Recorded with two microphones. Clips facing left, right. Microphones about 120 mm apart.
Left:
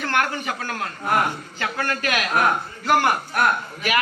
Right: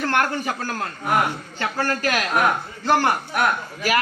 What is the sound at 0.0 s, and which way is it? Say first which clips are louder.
A man's voice: right 2 dB; 35° right (ahead or behind).